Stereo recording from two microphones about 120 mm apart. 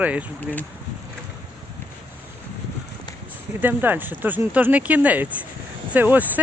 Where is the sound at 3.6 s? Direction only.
15° right (ahead or behind).